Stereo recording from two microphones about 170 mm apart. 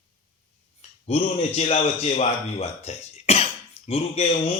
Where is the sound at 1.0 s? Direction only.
40° left (ahead or behind).